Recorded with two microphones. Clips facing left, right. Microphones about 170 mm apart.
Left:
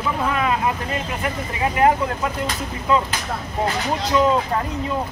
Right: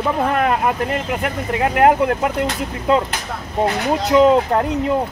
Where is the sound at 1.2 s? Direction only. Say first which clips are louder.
Right 4 dB; 65° right (ahead or behind).